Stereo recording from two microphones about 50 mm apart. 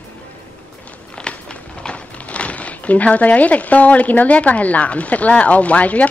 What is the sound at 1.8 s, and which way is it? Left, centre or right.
Speech, left.